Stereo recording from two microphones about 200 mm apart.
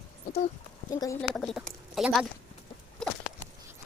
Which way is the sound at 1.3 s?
Centre (ahead or behind).